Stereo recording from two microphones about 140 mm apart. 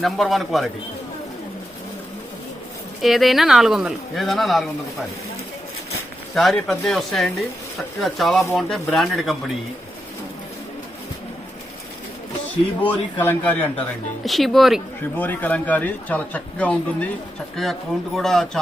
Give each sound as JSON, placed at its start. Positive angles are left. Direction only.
{"t": 0.0, "sound": "speech", "side_deg": 0}
{"t": 3.0, "sound": "speech", "side_deg": 0}
{"t": 6.3, "sound": "speech", "side_deg": 0}
{"t": 12.8, "sound": "speech", "side_deg": 10}
{"t": 14.3, "sound": "speech", "side_deg": 0}
{"t": 15.1, "sound": "speech", "side_deg": 10}